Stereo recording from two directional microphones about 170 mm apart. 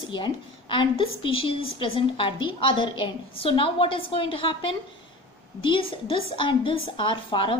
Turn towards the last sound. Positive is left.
turn(degrees=30)  # may be behind; listen again after turning